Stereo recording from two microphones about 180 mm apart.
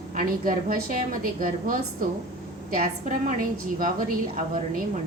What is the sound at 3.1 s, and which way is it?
Speech, 50° right (ahead or behind).